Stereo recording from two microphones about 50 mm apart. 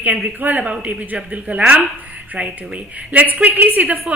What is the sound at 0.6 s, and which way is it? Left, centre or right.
A woman's voice, right.